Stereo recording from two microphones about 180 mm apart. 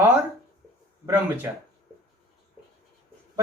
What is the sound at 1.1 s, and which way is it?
Speech, 10° right (ahead or behind).